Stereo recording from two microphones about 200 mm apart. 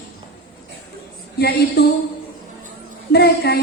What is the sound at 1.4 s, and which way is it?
Speech, 55° left (ahead or behind).